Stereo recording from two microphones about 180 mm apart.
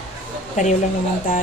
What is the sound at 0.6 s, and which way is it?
Speech, 45° left (ahead or behind).